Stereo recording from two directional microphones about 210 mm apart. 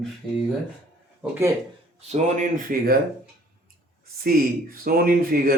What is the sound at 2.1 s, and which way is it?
Speech, 35° right (ahead or behind).